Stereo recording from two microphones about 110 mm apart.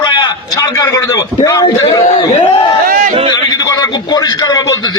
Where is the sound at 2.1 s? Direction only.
50° left (ahead or behind).